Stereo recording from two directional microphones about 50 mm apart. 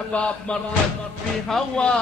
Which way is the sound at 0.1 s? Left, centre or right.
Left.